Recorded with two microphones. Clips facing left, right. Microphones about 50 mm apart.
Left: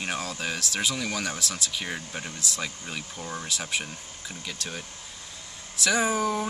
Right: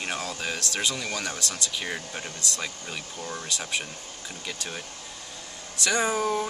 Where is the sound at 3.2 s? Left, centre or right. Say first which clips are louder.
Right 1 dB; centre.